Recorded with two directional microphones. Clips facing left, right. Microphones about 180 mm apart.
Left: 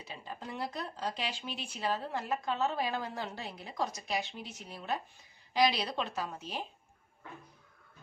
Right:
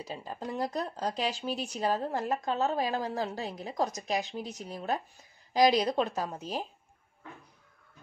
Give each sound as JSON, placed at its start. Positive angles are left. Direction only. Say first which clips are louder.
{"t": 0.0, "sound": "speech", "louder": "right 6 dB", "side_deg": -40}